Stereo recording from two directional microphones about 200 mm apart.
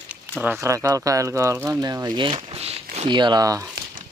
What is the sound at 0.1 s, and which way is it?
Speech, 10° right (ahead or behind).